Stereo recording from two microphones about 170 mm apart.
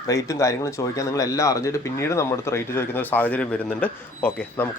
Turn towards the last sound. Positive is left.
turn(degrees=10)  # may be behind; listen again after turning